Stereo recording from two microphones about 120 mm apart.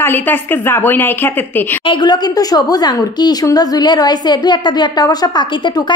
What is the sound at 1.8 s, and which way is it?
A woman's voice, 35° left (ahead or behind).